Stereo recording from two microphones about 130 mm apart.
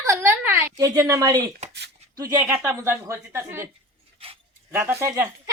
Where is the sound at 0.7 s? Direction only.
25° right (ahead or behind).